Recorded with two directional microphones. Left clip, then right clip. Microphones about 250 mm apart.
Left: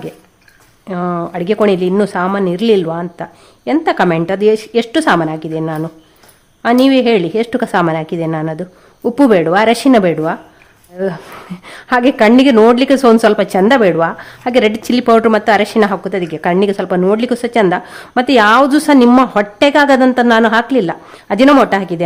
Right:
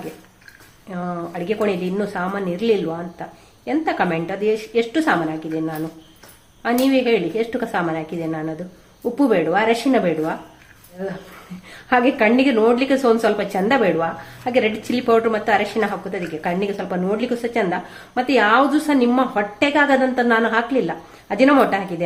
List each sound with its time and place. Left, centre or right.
0.9 s a woman's voice: left